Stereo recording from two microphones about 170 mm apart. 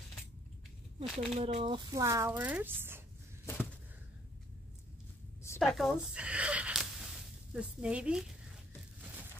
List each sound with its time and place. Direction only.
0.9 s speech: 35° right (ahead or behind); by 3.0 s 10° right (ahead or behind)
5.6 s speech: centre (ahead or behind)